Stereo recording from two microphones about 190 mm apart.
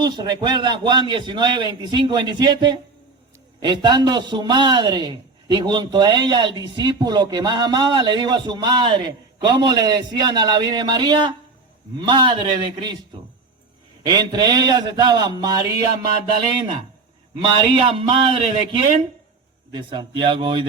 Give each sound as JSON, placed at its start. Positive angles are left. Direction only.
{"t": 0.0, "sound": "a man's voice", "side_deg": -25}
{"t": 14.0, "sound": "a man's voice", "side_deg": -20}
{"t": 17.4, "sound": "a man's voice", "side_deg": -30}